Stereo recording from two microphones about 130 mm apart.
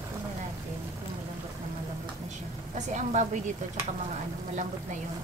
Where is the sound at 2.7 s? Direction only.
65° right (ahead or behind).